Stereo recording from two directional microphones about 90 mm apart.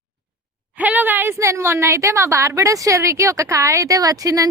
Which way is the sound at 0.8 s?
20° right (ahead or behind).